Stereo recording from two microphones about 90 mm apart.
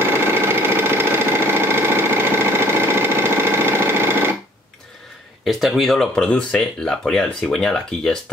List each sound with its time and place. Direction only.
0.0 s a sound: 25° right (ahead or behind)
5.4 s speech: centre (ahead or behind)
6.2 s speech: 10° left (ahead or behind)